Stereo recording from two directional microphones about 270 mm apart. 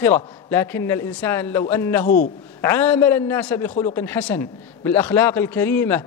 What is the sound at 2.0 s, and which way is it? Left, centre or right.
Speech, left.